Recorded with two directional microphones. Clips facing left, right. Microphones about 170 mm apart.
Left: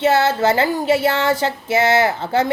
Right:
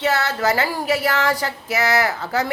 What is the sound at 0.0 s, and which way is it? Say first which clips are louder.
Music: left 5 dB; 25° left (ahead or behind).